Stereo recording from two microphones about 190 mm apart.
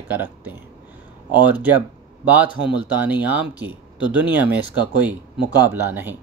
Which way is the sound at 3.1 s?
10° right (ahead or behind).